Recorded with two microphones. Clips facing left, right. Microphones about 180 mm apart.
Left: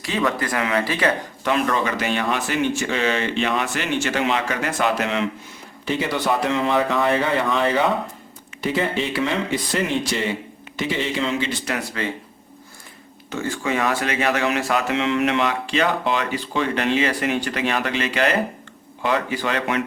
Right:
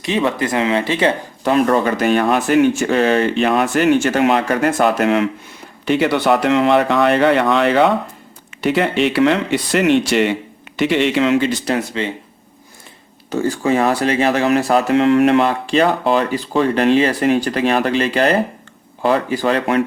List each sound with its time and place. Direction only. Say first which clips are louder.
0.0 s speech: right 5 dB; 25° right (ahead or behind)
1.6 s speech: right 7 dB; 40° right (ahead or behind)
5.8 s speech: right 7 dB; 70° right (ahead or behind)
11.3 s speech: right 8 dB; 45° right (ahead or behind)
11.7 s speech: right 6 dB; 25° right (ahead or behind)
13.3 s speech: right 7 dB; 35° right (ahead or behind)